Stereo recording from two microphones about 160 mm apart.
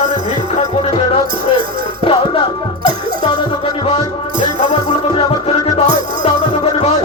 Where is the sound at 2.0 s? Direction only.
35° left (ahead or behind).